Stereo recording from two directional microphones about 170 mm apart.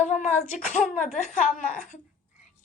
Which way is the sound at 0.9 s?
45° left (ahead or behind).